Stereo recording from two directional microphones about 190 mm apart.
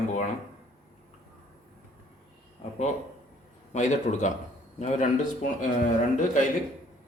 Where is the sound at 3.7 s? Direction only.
40° left (ahead or behind).